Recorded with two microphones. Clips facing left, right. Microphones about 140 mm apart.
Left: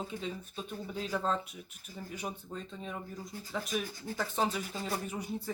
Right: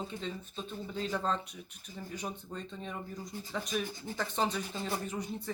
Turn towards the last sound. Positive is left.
turn(degrees=10)  # may be behind; listen again after turning